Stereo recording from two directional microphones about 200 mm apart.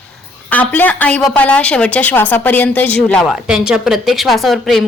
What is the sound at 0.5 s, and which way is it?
A woman's voice, 10° left (ahead or behind).